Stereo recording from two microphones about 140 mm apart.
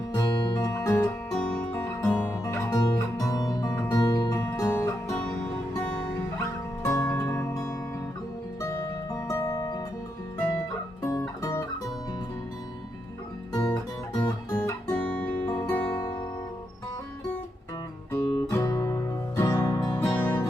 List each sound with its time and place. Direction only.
0.1 s music: 30° left (ahead or behind)
1.0 s music: 5° left (ahead or behind)
2.0 s music: 20° left (ahead or behind)
4.4 s music: 15° left (ahead or behind)
5.8 s music: 5° left (ahead or behind)
6.8 s music: 20° left (ahead or behind)
11.0 s music: 20° left (ahead or behind)
14.2 s guitar: 25° left (ahead or behind)
15.0 s guitar: 10° left (ahead or behind)
15.6 s music: 10° left (ahead or behind)
18.1 s guitar: 20° left (ahead or behind)
19.5 s music: 20° left (ahead or behind)